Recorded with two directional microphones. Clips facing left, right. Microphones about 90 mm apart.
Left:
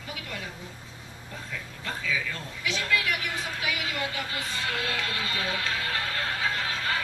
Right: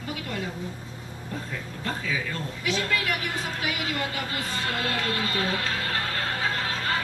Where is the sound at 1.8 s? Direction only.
40° right (ahead or behind).